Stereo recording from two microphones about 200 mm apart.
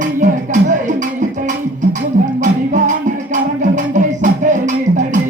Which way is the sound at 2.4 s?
40° right (ahead or behind).